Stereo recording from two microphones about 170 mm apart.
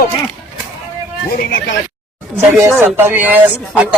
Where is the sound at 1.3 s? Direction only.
60° left (ahead or behind).